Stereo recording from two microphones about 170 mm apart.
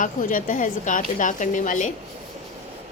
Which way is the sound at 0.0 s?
50° left (ahead or behind).